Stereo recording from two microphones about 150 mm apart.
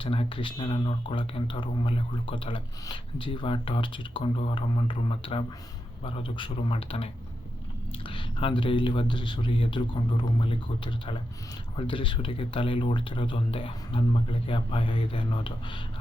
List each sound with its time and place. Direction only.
0.0 s speech: 35° left (ahead or behind)